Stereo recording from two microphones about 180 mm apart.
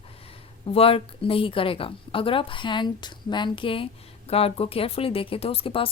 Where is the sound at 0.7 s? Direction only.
30° left (ahead or behind).